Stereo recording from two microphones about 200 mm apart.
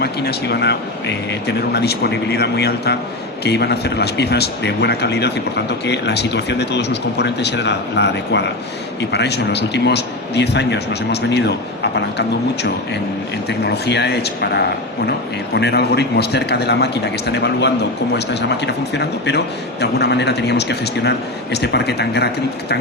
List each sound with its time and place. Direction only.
0.0 s a man's voice: 55° left (ahead or behind)
13.5 s a man's voice: 60° left (ahead or behind)